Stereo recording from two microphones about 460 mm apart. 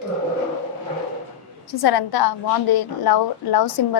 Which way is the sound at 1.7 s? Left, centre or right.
Left.